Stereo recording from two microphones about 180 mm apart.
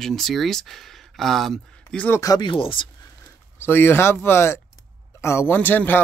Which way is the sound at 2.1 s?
20° left (ahead or behind).